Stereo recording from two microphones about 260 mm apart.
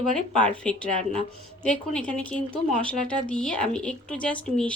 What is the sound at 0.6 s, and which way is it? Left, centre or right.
Speech, centre.